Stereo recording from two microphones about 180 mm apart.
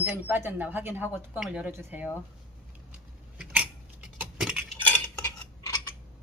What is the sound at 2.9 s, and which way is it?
Keys jangling, 5° right (ahead or behind).